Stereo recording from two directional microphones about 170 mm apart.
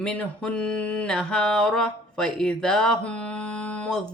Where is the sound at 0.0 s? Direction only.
5° left (ahead or behind).